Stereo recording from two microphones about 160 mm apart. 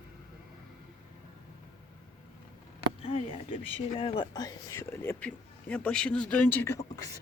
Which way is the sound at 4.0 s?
35° left (ahead or behind).